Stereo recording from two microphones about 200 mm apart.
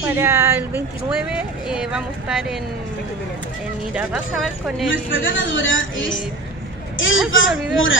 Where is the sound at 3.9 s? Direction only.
5° right (ahead or behind).